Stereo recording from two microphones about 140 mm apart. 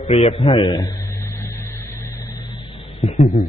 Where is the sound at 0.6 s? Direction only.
25° left (ahead or behind).